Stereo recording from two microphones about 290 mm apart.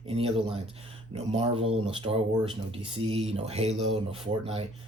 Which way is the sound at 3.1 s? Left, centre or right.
Centre.